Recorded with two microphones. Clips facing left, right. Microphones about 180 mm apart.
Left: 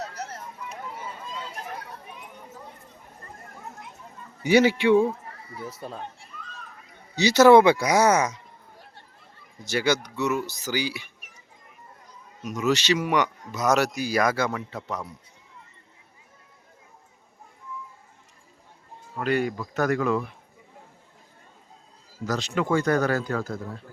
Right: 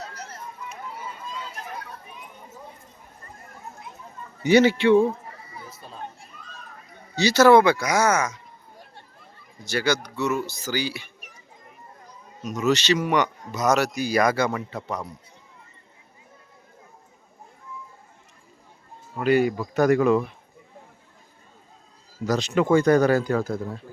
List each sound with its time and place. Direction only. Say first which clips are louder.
4.4 s speech: right 2 dB; 10° left (ahead or behind)
7.2 s speech: left 1 dB; 20° left (ahead or behind)
9.6 s speech: even; 20° left (ahead or behind)
12.4 s speech: right 2 dB; 10° left (ahead or behind)
19.2 s speech: right 5 dB; 5° right (ahead or behind)
22.3 s speech: right 5 dB; 15° right (ahead or behind)